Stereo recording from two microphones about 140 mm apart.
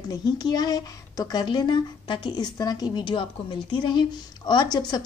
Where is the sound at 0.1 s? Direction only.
30° left (ahead or behind).